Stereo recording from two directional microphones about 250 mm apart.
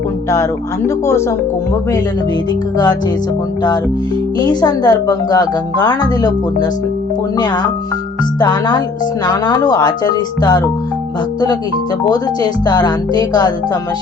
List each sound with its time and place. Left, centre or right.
0.9 s a woman's voice: centre
4.4 s a woman's voice: centre
12.0 s a woman's voice: centre